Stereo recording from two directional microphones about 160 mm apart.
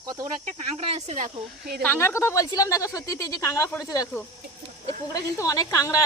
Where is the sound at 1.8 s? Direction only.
10° left (ahead or behind).